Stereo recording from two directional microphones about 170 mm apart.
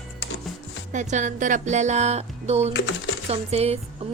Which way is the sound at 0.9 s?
45° right (ahead or behind).